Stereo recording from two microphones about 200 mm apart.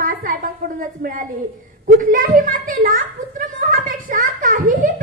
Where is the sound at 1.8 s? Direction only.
40° right (ahead or behind).